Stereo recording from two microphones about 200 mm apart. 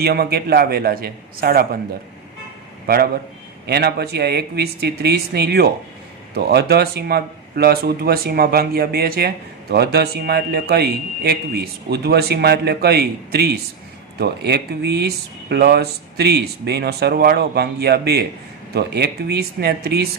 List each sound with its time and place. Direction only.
0.0 s speech: 50° right (ahead or behind)
2.8 s a man's voice: 50° right (ahead or behind)